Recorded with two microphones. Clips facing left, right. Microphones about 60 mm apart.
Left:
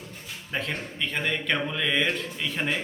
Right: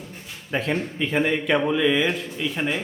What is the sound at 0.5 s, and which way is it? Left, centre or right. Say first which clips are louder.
A man's voice: right 6 dB; centre.